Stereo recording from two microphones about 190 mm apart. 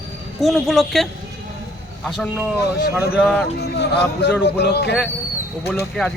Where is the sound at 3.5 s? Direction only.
60° left (ahead or behind).